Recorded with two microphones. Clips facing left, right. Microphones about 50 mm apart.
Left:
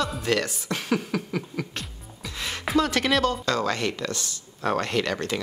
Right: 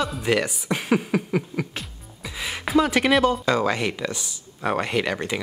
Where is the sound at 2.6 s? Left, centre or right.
Centre.